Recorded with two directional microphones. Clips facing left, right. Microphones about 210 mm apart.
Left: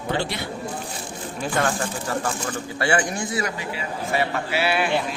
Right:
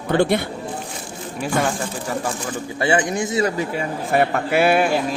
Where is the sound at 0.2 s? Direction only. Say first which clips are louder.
Right 10 dB; 55° right (ahead or behind).